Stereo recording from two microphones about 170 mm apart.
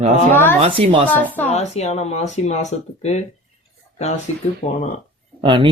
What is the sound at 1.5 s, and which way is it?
Speech, 40° left (ahead or behind).